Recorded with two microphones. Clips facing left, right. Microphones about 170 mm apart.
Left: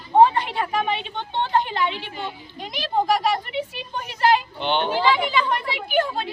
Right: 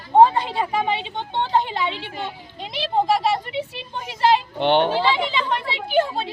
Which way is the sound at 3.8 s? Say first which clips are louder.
Right 1 dB; 25° right (ahead or behind).